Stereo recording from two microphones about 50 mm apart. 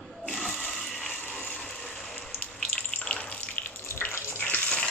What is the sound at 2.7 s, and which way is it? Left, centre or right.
Water, left.